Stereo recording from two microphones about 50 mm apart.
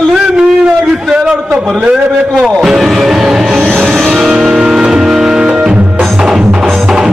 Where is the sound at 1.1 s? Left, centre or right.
Centre.